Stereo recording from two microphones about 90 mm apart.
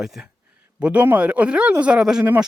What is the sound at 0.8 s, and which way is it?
Speech, 15° right (ahead or behind).